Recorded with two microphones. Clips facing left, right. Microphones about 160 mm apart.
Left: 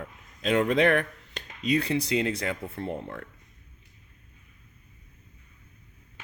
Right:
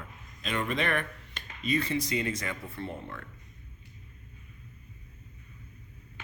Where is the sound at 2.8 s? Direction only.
35° left (ahead or behind).